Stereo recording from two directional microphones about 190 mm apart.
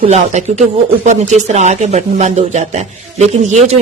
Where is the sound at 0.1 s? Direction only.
35° right (ahead or behind).